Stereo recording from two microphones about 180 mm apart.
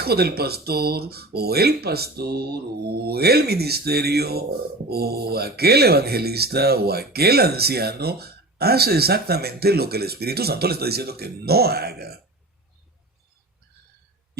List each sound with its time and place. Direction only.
0.0 s speech: 60° right (ahead or behind)